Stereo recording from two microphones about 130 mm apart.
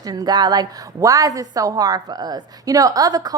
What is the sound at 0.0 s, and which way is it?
A woman's voice, 30° right (ahead or behind).